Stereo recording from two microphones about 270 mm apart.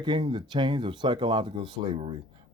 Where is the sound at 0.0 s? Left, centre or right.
Centre.